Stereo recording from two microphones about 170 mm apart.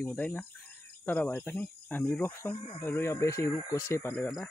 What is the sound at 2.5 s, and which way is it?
Speech, 30° left (ahead or behind).